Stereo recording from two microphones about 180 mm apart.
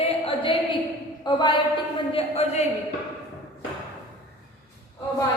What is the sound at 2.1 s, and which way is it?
Speech, 35° left (ahead or behind).